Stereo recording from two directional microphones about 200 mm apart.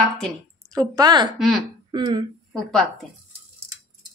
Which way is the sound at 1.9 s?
20° right (ahead or behind).